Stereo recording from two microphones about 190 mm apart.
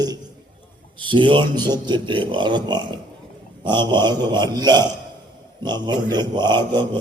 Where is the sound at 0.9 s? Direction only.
25° right (ahead or behind).